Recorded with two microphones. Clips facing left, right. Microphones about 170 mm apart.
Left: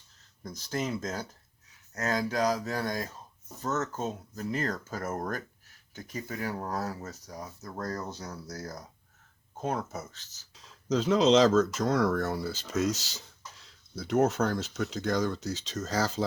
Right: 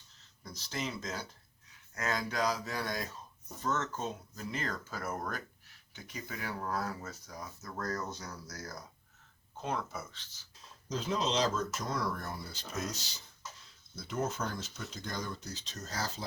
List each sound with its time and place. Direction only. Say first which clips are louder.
0.4 s speech: left 6 dB; 50° left (ahead or behind)
9.6 s speech: left 4 dB; 45° left (ahead or behind)
10.5 s speech: left 10 dB; 90° left
13.9 s speech: left 10 dB; 75° left (ahead or behind); by 16.2 s 90° left